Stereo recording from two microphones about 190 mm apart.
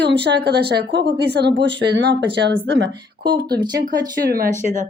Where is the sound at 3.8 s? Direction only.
50° right (ahead or behind).